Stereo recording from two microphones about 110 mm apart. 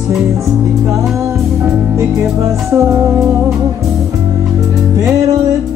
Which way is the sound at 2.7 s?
25° right (ahead or behind).